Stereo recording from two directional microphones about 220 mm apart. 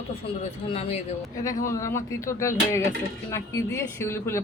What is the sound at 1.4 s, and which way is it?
Speech, 15° left (ahead or behind).